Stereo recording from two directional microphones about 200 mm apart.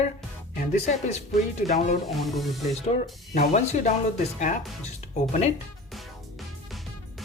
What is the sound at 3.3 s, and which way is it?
Speech, 35° left (ahead or behind).